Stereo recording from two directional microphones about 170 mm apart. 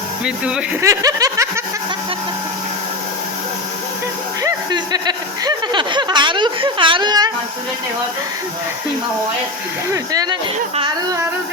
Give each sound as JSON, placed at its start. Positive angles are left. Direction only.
{"t": 0.3, "sound": "speech", "side_deg": -5}
{"t": 0.8, "sound": "snicker", "side_deg": -20}
{"t": 4.4, "sound": "speech", "side_deg": -25}
{"t": 9.9, "sound": "speech", "side_deg": -20}